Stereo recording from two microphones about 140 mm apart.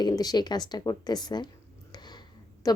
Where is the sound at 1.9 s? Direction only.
30° left (ahead or behind).